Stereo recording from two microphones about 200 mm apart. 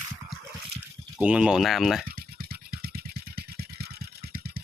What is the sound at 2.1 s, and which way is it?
Vehicle, 45° right (ahead or behind).